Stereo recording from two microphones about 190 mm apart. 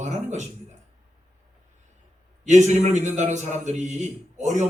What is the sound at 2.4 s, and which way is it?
A man's voice, 40° right (ahead or behind).